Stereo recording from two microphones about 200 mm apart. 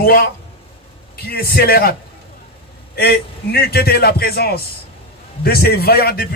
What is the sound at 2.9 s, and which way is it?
A man's voice, 55° left (ahead or behind).